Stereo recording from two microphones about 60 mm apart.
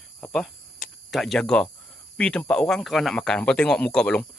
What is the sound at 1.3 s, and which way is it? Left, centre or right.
Speech, centre.